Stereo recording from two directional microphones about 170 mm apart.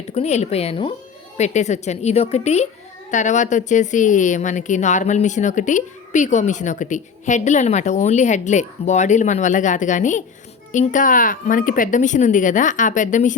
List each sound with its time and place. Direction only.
0.1 s a woman's voice: 40° left (ahead or behind)